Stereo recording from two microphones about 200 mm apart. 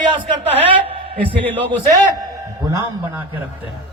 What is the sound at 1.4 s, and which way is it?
Speech, 10° left (ahead or behind).